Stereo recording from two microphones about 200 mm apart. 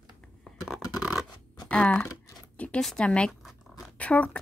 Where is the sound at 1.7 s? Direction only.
5° left (ahead or behind).